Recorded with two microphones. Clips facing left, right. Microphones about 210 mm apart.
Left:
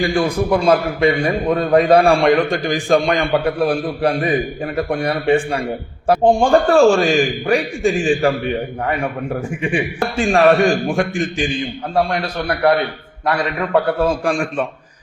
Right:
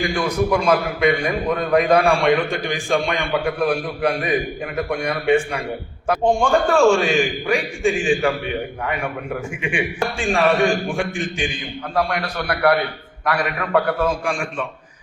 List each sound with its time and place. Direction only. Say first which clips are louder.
0.0 s a man's voice: left 3 dB; 30° left (ahead or behind)